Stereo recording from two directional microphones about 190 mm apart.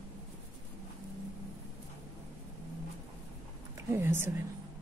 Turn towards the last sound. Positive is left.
turn(degrees=-15)  # may be behind; listen again after turning